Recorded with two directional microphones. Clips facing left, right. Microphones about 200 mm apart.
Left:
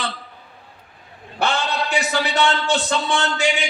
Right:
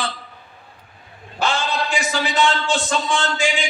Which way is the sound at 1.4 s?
60° left (ahead or behind).